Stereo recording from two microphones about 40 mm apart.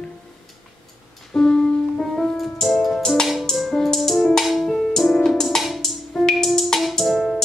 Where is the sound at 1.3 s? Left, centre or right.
Centre.